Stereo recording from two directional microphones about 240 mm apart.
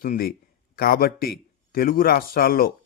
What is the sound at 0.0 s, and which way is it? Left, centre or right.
Speech, left.